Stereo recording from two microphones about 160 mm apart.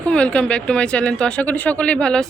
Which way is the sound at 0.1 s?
5° left (ahead or behind).